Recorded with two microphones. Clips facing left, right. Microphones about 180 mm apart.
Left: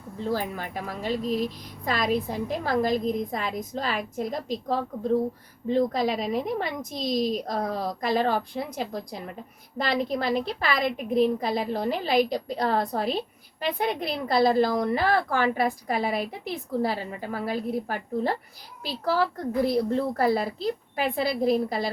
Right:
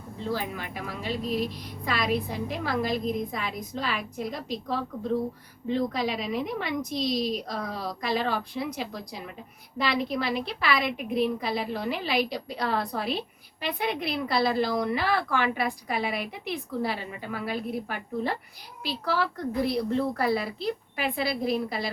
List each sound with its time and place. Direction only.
0.3 s a woman's voice: 45° left (ahead or behind)